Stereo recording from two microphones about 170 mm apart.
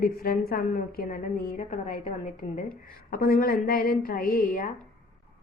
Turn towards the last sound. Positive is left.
turn(degrees=50)  # may be behind; listen again after turning